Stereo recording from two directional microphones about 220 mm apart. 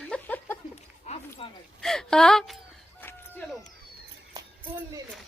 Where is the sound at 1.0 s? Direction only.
30° left (ahead or behind).